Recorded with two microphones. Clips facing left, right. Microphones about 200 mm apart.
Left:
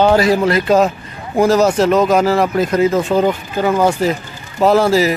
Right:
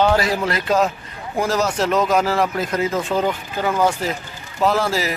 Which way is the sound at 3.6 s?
25° left (ahead or behind).